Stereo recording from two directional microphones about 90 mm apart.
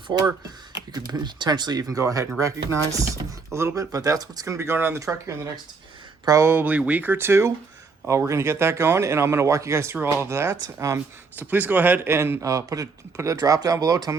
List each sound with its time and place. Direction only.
0.1 s speech: 45° right (ahead or behind)
6.5 s speech: 20° right (ahead or behind)
11.3 s speech: 20° right (ahead or behind); by 14.2 s 40° right (ahead or behind)